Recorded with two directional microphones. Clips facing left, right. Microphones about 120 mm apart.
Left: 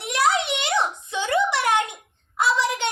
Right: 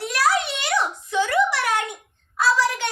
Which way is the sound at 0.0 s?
20° left (ahead or behind).